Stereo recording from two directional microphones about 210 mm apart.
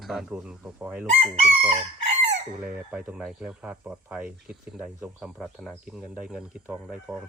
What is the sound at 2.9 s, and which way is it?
Speech, 5° right (ahead or behind).